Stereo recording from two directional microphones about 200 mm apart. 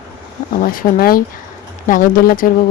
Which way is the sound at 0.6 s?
45° left (ahead or behind).